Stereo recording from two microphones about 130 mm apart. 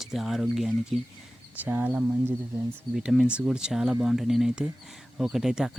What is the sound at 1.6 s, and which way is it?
Speech, 15° right (ahead or behind).